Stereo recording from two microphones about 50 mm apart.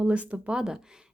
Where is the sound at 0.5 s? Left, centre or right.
Centre.